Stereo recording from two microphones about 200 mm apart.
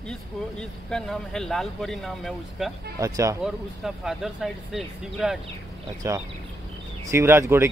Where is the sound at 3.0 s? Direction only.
15° right (ahead or behind).